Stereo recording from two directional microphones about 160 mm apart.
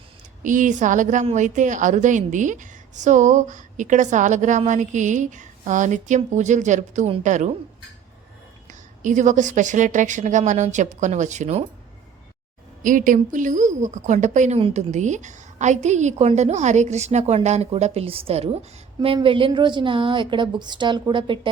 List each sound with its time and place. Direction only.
0.4 s a woman's voice: 55° right (ahead or behind)
9.0 s a woman's voice: 50° right (ahead or behind)
12.8 s a woman's voice: 55° right (ahead or behind); by 21.5 s 30° right (ahead or behind)